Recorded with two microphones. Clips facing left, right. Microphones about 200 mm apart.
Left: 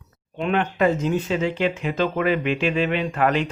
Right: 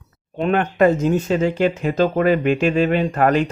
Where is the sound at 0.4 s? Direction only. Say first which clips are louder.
Right 4 dB; 45° right (ahead or behind).